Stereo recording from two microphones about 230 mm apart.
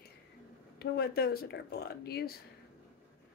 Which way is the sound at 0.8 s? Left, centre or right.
Left.